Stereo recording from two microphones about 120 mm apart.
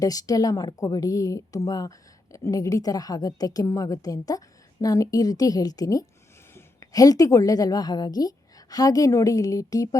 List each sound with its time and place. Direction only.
0.0 s a woman's voice: 30° left (ahead or behind)